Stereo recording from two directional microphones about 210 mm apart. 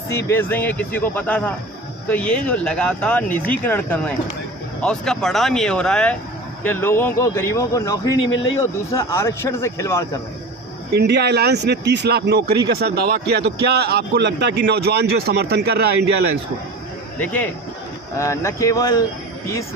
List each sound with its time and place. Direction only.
0.1 s speech: 10° left (ahead or behind)
8.2 s a man's voice: 70° left (ahead or behind)
8.9 s speech: 15° left (ahead or behind)
10.9 s speech: 50° right (ahead or behind)
17.2 s speech: 10° left (ahead or behind)